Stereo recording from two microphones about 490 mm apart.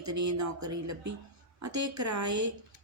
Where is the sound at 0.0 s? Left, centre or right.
Right.